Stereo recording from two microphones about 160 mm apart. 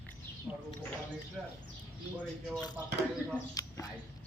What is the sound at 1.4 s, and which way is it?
Speech, 5° right (ahead or behind).